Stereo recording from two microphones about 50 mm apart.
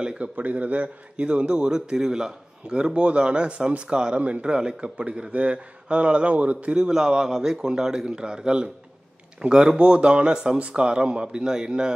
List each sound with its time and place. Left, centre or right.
0.0 s a man's voice: right